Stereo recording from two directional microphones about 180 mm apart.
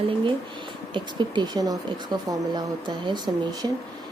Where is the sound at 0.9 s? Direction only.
25° right (ahead or behind).